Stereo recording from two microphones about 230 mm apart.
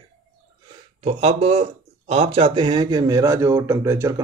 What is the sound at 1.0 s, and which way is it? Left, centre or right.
Speech, right.